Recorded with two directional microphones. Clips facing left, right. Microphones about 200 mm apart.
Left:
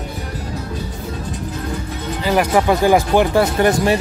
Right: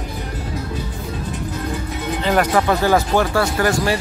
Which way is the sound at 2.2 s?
10° left (ahead or behind).